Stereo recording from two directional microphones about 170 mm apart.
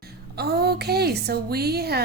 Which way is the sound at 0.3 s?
70° right (ahead or behind).